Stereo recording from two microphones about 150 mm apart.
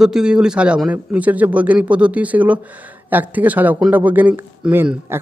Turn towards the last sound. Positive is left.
turn(degrees=-15)  # may be behind; listen again after turning